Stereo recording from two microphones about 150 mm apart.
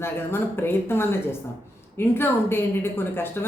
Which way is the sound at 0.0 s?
15° left (ahead or behind).